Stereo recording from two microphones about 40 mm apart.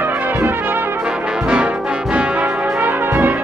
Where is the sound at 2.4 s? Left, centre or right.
Right.